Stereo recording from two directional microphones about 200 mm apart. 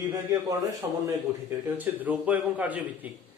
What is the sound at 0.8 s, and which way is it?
Speech, 15° right (ahead or behind).